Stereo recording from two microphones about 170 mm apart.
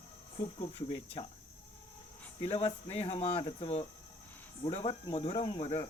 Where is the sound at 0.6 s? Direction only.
35° left (ahead or behind).